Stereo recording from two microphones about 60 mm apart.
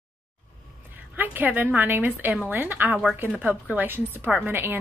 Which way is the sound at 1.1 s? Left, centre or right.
Right.